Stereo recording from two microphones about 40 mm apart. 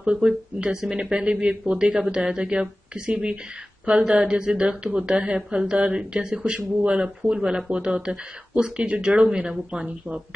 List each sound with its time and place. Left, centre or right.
0.0 s speech: right
3.9 s speech: centre